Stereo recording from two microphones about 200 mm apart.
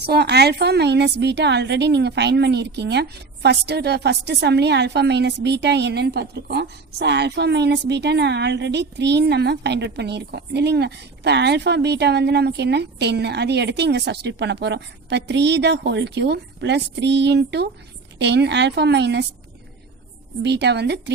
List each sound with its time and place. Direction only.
0.0 s a woman's voice: 55° right (ahead or behind)
20.4 s a woman's voice: 60° right (ahead or behind)